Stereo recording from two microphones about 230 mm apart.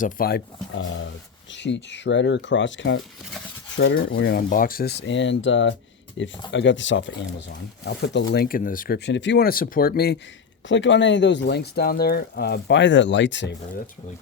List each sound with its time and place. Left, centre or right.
0.0 s speech: left
0.8 s a sound: left
1.5 s speech: left
3.8 s a sound: left
4.2 s speech: left
10.7 s speech: left